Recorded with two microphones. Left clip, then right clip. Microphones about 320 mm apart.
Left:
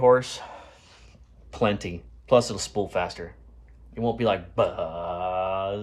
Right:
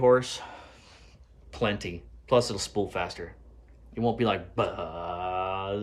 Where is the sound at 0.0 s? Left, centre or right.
Centre.